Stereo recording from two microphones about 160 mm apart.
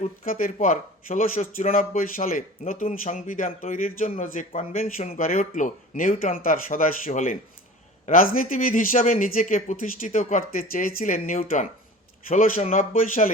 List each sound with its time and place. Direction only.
0.0 s speech: 60° left (ahead or behind)